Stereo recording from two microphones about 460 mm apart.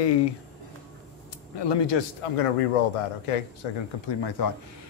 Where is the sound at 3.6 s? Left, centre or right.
Left.